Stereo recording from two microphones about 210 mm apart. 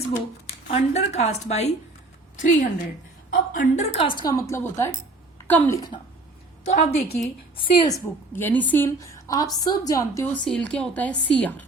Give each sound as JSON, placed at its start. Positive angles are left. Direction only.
{"t": 0.4, "sound": "a woman's voice", "side_deg": 30}
{"t": 6.7, "sound": "a woman's voice", "side_deg": 30}